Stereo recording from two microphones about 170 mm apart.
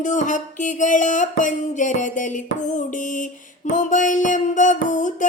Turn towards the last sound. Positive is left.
turn(degrees=50)  # may be behind; listen again after turning